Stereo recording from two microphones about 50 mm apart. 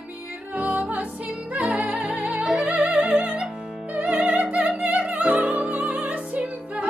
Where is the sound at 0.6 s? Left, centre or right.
Right.